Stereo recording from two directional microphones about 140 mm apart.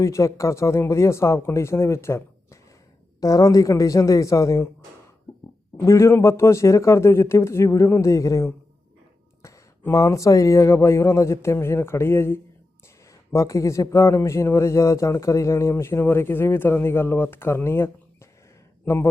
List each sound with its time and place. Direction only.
0.0 s a man's voice: 20° left (ahead or behind)
5.7 s a man's voice: 20° left (ahead or behind)